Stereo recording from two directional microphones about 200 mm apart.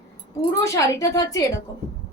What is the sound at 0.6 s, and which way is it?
Speech, 15° left (ahead or behind).